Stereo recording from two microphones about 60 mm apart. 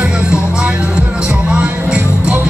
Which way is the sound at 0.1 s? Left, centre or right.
Centre.